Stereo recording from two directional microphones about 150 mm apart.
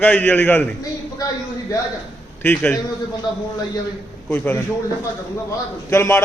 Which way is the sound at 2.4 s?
10° left (ahead or behind).